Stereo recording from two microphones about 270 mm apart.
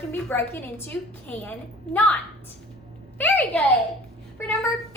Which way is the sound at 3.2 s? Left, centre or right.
Centre.